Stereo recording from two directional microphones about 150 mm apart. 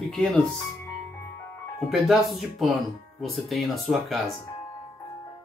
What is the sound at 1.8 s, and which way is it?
Speech, centre (ahead or behind).